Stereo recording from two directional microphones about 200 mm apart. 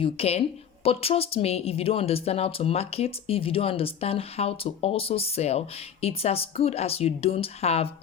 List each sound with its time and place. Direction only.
0.0 s a woman's voice: 30° left (ahead or behind)